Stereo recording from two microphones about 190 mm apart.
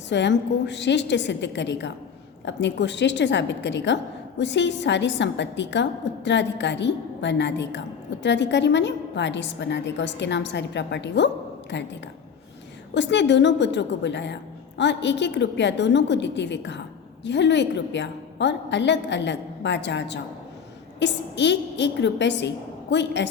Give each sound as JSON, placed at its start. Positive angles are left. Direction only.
{"t": 0.1, "sound": "a woman's voice", "side_deg": 70}
{"t": 12.9, "sound": "a woman's voice", "side_deg": 70}